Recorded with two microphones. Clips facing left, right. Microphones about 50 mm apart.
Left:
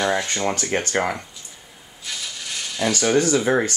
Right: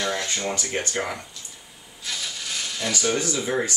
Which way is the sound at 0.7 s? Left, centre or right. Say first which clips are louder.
Left 6 dB; left.